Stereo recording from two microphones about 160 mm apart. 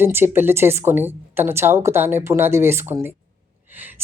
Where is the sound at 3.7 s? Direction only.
10° right (ahead or behind).